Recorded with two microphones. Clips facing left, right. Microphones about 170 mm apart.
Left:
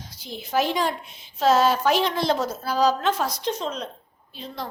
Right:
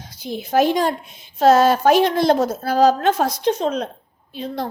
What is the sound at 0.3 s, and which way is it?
A woman's voice, 50° right (ahead or behind).